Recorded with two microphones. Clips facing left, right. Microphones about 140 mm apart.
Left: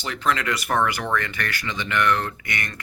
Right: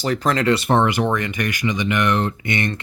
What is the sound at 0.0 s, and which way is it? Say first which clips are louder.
Speech: right 6 dB; 40° right (ahead or behind).